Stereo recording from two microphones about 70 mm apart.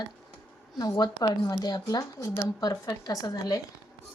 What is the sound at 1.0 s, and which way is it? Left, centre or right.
A woman's voice, left.